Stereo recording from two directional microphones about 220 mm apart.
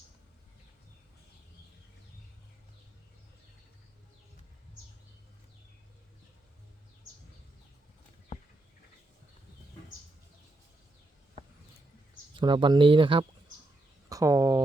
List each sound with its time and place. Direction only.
12.4 s speech: 20° right (ahead or behind)